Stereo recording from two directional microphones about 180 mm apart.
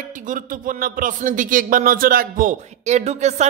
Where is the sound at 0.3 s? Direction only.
50° right (ahead or behind).